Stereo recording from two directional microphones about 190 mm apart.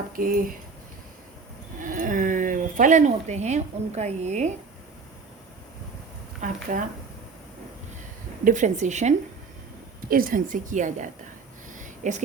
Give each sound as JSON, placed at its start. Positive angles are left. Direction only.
{"t": 0.2, "sound": "a woman's voice", "side_deg": -50}
{"t": 1.8, "sound": "speech", "side_deg": -45}
{"t": 6.4, "sound": "a woman's voice", "side_deg": -45}
{"t": 8.4, "sound": "a woman's voice", "side_deg": -40}
{"t": 11.7, "sound": "a sound", "side_deg": -40}